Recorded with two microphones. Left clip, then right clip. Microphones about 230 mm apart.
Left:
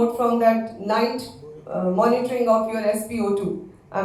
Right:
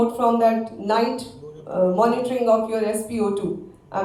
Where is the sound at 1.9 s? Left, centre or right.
Right.